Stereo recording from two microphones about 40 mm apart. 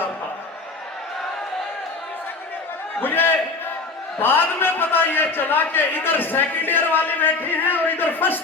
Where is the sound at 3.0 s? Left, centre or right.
Left.